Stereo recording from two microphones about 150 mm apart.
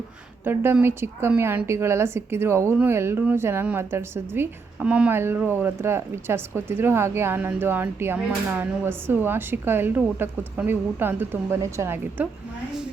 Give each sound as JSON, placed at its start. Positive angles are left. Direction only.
{"t": 0.4, "sound": "speech", "side_deg": -15}